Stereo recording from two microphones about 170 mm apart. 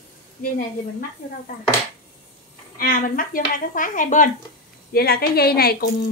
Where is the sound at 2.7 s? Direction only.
55° left (ahead or behind).